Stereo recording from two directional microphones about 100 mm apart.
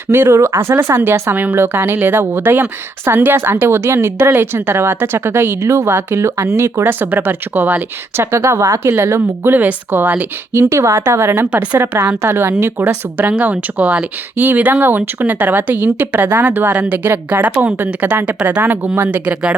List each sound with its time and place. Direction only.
0.1 s a woman's voice: 25° right (ahead or behind)